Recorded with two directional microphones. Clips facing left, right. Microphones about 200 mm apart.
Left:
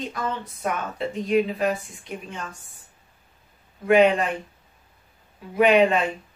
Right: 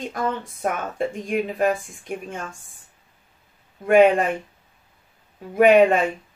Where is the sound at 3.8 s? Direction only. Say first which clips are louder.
Right 2 dB; 50° right (ahead or behind).